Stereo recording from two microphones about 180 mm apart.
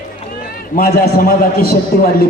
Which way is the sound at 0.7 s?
55° left (ahead or behind).